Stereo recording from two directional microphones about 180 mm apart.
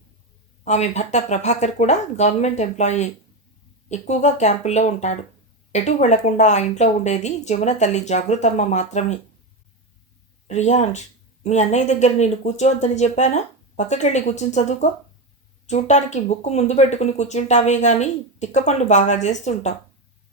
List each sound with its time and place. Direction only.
0.6 s speech: 40° left (ahead or behind)
10.4 s speech: 40° left (ahead or behind)